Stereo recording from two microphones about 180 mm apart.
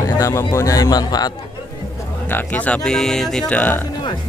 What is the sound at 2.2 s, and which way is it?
Speech, 10° left (ahead or behind).